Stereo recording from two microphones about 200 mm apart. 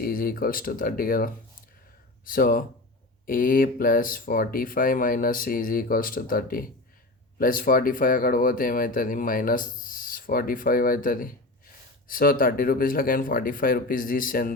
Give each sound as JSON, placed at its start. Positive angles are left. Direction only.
{"t": 0.0, "sound": "speech", "side_deg": 45}